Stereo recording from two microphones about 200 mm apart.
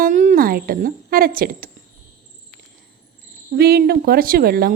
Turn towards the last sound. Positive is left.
turn(degrees=-50)  # may be behind; listen again after turning